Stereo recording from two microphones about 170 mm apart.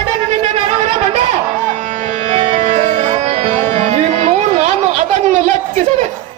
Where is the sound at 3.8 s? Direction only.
45° right (ahead or behind).